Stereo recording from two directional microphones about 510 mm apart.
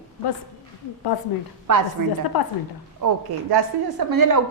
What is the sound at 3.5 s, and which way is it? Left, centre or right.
Speech, right.